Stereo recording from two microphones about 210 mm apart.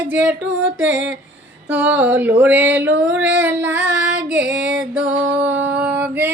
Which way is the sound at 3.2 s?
10° right (ahead or behind).